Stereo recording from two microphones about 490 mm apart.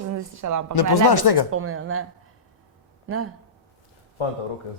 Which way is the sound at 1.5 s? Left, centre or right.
Right.